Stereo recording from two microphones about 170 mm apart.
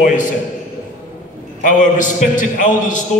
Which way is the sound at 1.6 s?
50° left (ahead or behind).